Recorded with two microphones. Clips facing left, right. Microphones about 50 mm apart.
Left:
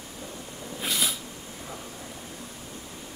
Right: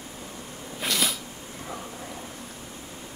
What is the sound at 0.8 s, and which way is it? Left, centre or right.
Zipper, right.